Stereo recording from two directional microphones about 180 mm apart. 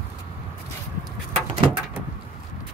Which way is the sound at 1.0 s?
30° right (ahead or behind).